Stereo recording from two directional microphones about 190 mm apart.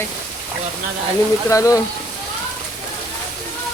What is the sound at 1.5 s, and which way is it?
Speech, 15° left (ahead or behind).